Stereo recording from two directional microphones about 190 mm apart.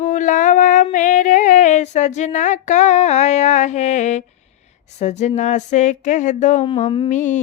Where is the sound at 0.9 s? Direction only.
40° left (ahead or behind).